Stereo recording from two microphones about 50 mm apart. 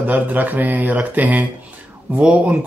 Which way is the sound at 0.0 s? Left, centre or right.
Right.